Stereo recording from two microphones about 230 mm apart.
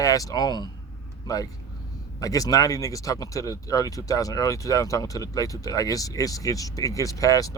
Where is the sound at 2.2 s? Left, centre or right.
Centre.